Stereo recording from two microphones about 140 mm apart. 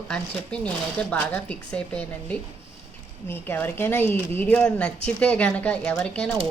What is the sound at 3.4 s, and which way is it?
Speech, 15° left (ahead or behind).